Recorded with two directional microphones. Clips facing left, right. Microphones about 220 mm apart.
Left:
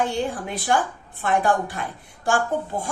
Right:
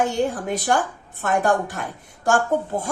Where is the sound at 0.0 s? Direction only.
45° right (ahead or behind).